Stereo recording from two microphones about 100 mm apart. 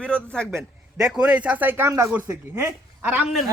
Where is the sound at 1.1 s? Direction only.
10° right (ahead or behind); by 2.6 s 30° right (ahead or behind).